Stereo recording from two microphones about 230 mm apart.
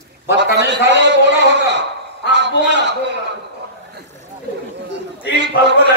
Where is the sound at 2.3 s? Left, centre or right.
Right.